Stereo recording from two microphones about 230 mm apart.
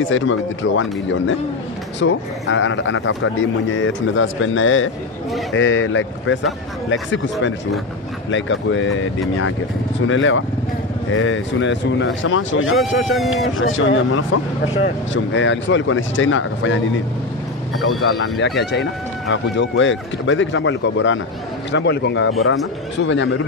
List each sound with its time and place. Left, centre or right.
0.1 s a man's voice: left
8.3 s a man's voice: left
10.0 s a man's voice: left
12.7 s speech: centre
13.6 s a man's voice: left
18.0 s a man's voice: left